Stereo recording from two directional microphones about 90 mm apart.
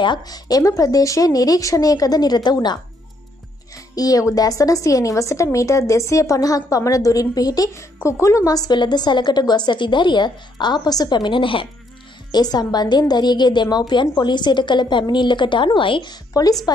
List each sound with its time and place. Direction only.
0.0 s speech: 55° left (ahead or behind)
3.7 s a woman's voice: 40° left (ahead or behind)
8.7 s speech: 55° left (ahead or behind); by 11.7 s 75° left (ahead or behind)
12.3 s speech: 50° left (ahead or behind)
16.7 s speech: 45° left (ahead or behind)